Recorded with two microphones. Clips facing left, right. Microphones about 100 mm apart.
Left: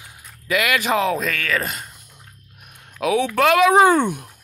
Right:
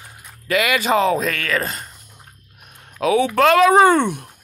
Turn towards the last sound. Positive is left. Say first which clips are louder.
# right 1 dB
turn(degrees=10)  # may be behind; listen again after turning